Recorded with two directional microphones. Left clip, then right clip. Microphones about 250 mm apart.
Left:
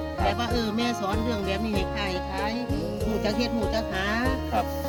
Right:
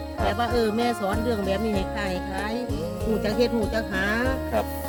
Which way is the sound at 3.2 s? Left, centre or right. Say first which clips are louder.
Right 4 dB; centre.